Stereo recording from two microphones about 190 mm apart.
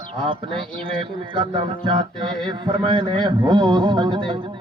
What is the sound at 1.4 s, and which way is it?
A man's voice, 25° right (ahead or behind).